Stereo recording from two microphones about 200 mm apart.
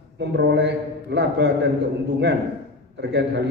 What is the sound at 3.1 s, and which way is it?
Speech, 60° right (ahead or behind).